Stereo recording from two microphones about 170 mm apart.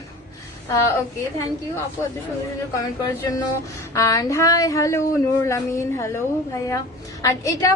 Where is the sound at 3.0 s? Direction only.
20° left (ahead or behind).